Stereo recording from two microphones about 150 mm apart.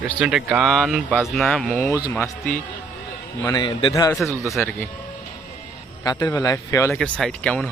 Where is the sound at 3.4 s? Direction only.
25° left (ahead or behind).